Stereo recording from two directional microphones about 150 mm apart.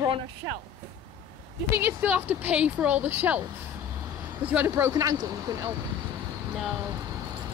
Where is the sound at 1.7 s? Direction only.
10° right (ahead or behind).